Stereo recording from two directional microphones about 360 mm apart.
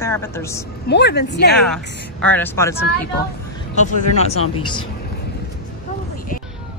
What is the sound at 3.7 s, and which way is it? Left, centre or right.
Speech, centre.